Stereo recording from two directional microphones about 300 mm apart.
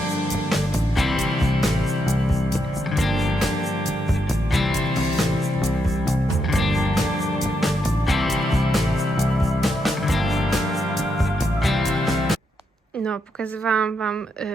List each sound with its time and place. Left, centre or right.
0.5 s music: centre
3.0 s music: centre
4.5 s music: centre
11.6 s music: centre
13.7 s a woman's voice: centre